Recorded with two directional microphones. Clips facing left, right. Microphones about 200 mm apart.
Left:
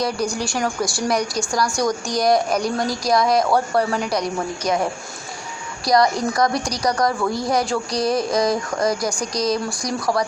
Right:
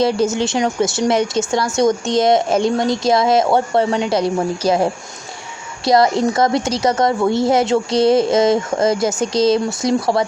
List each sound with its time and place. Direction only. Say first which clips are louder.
0.0 s a woman's voice: right 7 dB; 25° right (ahead or behind)